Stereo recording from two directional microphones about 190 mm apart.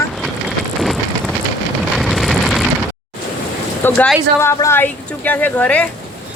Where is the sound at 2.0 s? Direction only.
Centre (ahead or behind).